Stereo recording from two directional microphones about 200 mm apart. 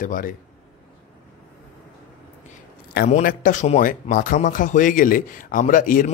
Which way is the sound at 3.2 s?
45° left (ahead or behind).